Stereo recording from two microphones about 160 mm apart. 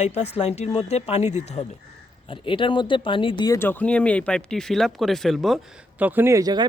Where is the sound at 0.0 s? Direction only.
40° left (ahead or behind).